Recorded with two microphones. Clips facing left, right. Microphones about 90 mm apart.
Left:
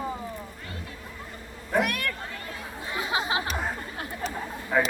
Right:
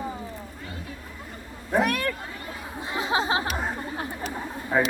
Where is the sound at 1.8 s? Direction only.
35° right (ahead or behind).